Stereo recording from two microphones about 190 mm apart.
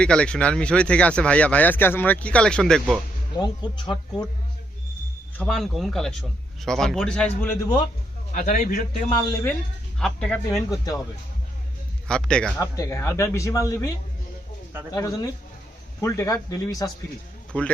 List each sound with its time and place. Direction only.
0.0 s speech: 5° left (ahead or behind)
3.3 s speech: 20° left (ahead or behind)
5.4 s speech: centre (ahead or behind)
8.3 s a man's voice: 40° left (ahead or behind)
9.3 s speech: 10° left (ahead or behind)
12.0 s speech: 5° left (ahead or behind)
12.5 s speech: 15° left (ahead or behind)
14.7 s speech: 10° right (ahead or behind)
14.9 s speech: 20° left (ahead or behind)
17.5 s speech: 5° left (ahead or behind)